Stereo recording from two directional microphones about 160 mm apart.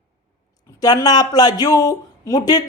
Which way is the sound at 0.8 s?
25° left (ahead or behind).